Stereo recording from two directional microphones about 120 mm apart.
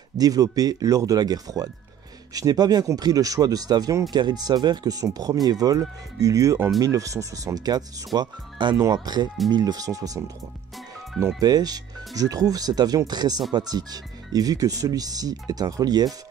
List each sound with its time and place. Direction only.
0.2 s speech: 30° right (ahead or behind)
11.3 s speech: 35° right (ahead or behind)